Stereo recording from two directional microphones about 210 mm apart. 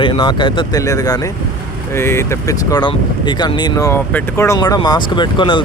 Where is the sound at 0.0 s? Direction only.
25° left (ahead or behind).